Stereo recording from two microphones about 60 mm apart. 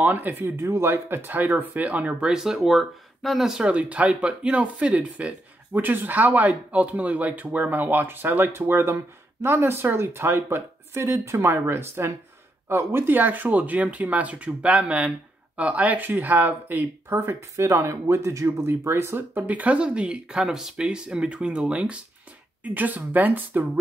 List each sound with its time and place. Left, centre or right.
0.0 s speech: right
0.6 s speech: right; by 3.5 s centre
3.5 s speech: right
17.6 s speech: right
19.4 s speech: right